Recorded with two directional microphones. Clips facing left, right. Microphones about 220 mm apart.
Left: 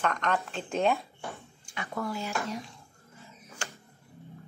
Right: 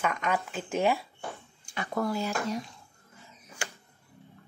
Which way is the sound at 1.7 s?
35° right (ahead or behind).